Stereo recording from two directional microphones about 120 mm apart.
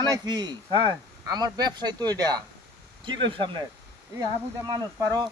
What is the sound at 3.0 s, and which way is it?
Speech, 45° right (ahead or behind).